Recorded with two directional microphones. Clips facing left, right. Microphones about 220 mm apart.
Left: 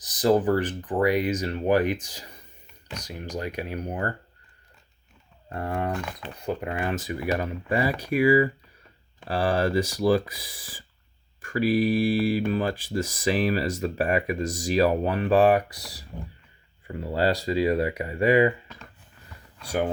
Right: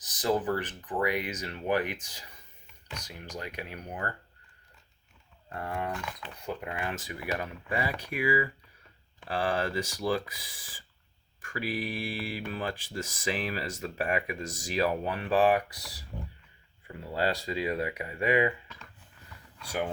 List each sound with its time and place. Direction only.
0.0 s speech: 35° left (ahead or behind)
5.5 s speech: 35° left (ahead or behind)